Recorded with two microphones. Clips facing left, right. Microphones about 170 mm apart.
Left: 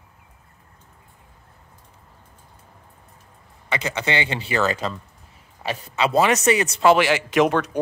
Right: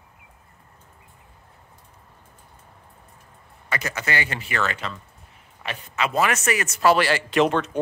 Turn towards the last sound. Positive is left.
turn(degrees=15)  # may be behind; listen again after turning